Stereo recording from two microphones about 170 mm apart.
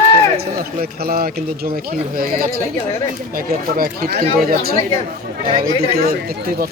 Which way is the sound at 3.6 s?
60° right (ahead or behind).